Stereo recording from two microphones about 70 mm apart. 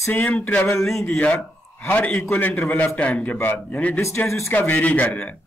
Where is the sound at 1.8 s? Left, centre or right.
Left.